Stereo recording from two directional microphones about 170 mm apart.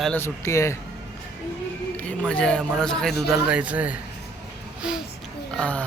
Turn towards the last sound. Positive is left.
turn(degrees=5)  # may be behind; listen again after turning